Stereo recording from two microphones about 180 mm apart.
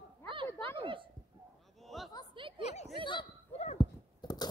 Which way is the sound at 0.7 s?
30° right (ahead or behind).